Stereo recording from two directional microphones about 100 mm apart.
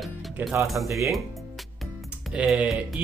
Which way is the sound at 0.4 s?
15° right (ahead or behind).